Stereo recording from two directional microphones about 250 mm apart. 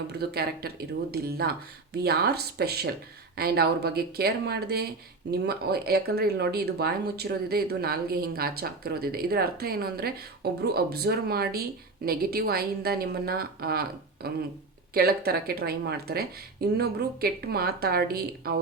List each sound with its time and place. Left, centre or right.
0.2 s speech: right